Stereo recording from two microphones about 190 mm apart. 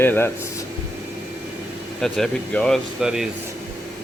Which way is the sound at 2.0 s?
5° left (ahead or behind).